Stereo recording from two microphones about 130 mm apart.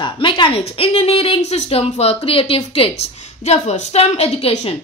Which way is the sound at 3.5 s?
55° left (ahead or behind).